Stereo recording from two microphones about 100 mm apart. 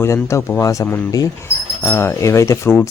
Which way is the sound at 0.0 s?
30° left (ahead or behind).